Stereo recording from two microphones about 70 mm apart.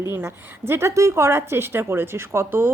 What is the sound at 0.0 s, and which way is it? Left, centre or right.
A woman's voice, right.